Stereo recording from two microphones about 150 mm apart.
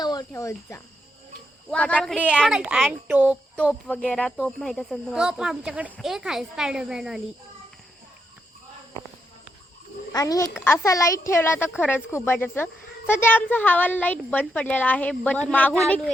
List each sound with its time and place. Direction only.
0.0 s speech: 25° left (ahead or behind)
1.7 s a child's voice: 10° left (ahead or behind)
2.5 s a child's voice: 5° right (ahead or behind)
3.9 s speech: 10° left (ahead or behind)
10.1 s a child's voice: 25° left (ahead or behind); by 16.1 s 5° left (ahead or behind)